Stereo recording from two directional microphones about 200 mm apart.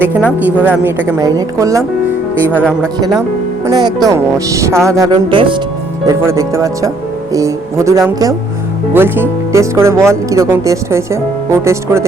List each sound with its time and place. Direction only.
0.6 s speech: 10° right (ahead or behind)
3.7 s speech: 20° right (ahead or behind)